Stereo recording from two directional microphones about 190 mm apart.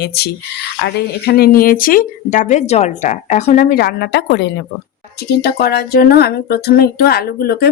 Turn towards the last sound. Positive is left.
turn(degrees=55)  # may be behind; listen again after turning